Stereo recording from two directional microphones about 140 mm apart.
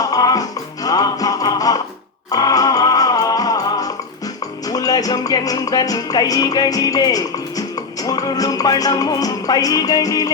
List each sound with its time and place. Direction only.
0.0 s music: 25° left (ahead or behind)